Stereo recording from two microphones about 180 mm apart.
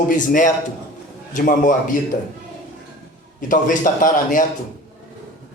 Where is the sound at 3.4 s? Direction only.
45° left (ahead or behind).